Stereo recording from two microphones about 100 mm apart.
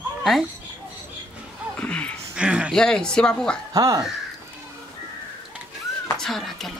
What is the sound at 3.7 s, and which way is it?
Speech, 35° right (ahead or behind).